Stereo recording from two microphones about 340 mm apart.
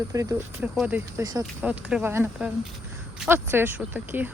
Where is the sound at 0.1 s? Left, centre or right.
Centre.